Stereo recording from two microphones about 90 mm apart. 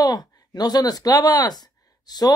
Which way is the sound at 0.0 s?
50° left (ahead or behind).